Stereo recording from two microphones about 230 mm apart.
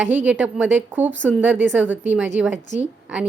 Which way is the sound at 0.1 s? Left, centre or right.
Centre.